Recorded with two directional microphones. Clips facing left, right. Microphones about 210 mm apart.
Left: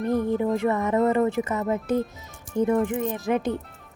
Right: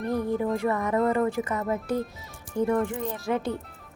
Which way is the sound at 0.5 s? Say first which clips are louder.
Left 3 dB; 25° left (ahead or behind).